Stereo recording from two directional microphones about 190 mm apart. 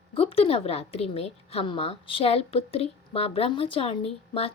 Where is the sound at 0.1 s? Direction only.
30° left (ahead or behind).